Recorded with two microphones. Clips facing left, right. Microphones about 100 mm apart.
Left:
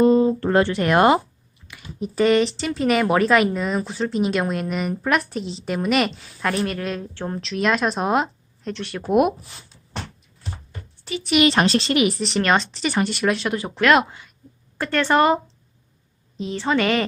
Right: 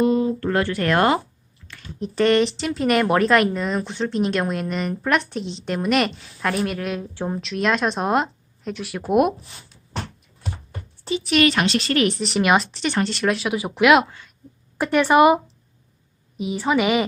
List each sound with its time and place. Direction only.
0.0 s speech: 30° left (ahead or behind); by 9.5 s centre (ahead or behind)
11.1 s a sound: 30° right (ahead or behind)
11.5 s a woman's voice: 35° left (ahead or behind)
12.0 s a woman's voice: centre (ahead or behind)
16.4 s a woman's voice: 10° right (ahead or behind)